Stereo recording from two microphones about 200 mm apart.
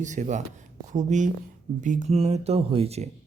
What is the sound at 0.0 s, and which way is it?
Speech, 40° right (ahead or behind).